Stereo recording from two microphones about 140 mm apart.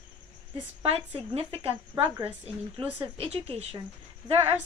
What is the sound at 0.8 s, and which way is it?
Speech, 45° right (ahead or behind).